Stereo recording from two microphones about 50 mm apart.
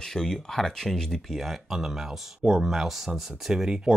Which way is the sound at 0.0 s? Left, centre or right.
Centre.